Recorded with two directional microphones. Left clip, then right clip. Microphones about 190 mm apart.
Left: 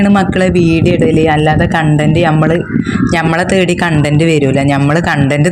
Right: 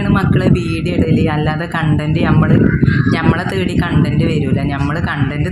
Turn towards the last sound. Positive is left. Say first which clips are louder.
# left 8 dB
turn(degrees=40)  # may be behind; listen again after turning